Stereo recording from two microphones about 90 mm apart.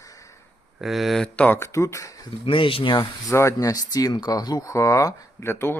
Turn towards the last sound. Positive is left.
turn(degrees=25)  # may be behind; listen again after turning